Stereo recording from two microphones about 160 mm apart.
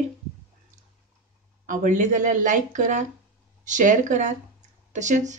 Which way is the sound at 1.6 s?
55° right (ahead or behind).